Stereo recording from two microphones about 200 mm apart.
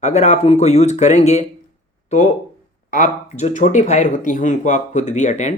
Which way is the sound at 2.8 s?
40° left (ahead or behind).